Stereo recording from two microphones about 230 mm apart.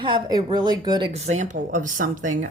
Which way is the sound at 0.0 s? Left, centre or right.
Centre.